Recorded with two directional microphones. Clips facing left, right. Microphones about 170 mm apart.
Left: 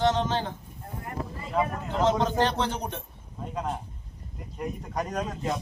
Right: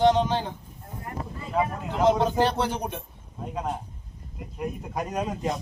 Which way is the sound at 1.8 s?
10° right (ahead or behind).